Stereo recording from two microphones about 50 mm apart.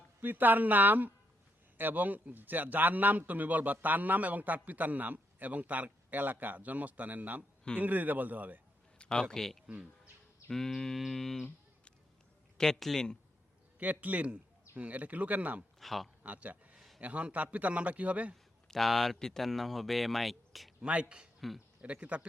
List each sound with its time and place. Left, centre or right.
0.2 s a man's voice: right
9.0 s a sound: left
9.3 s speech: centre
12.5 s speech: centre
13.9 s a man's voice: right
15.8 s speech: centre
16.2 s speech: right
16.7 s a sound: centre
17.0 s a man's voice: right
18.7 s speech: centre
20.8 s a man's voice: right